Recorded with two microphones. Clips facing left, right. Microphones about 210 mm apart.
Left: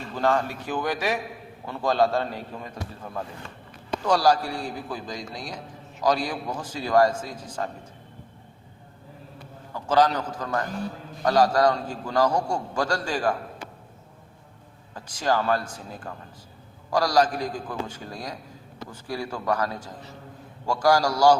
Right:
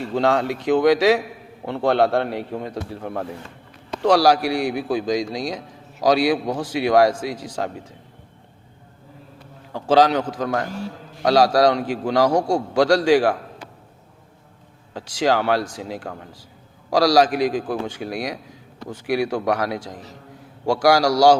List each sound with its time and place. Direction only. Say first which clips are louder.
0.0 s a man's voice: right 5 dB; 75° right (ahead or behind)
1.6 s a man's voice: right 4 dB; 70° right (ahead or behind); by 7.7 s 85° right
9.9 s a man's voice: right 5 dB; 90° right
14.9 s a man's voice: right 5 dB; 80° right
16.9 s a man's voice: right 6 dB; 90° right